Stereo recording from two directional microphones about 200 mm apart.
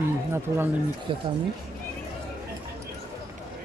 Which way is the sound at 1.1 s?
25° right (ahead or behind).